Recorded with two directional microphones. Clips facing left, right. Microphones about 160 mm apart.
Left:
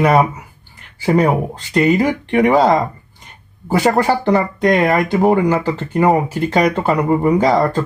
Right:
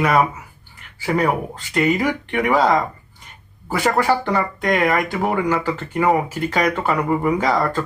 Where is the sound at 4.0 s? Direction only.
30° left (ahead or behind).